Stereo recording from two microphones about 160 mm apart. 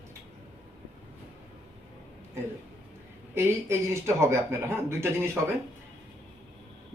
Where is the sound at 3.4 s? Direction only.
15° right (ahead or behind).